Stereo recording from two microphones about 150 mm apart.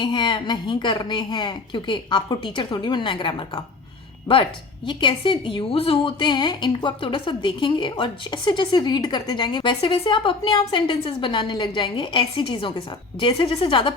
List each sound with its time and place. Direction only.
0.0 s a woman's voice: 30° left (ahead or behind)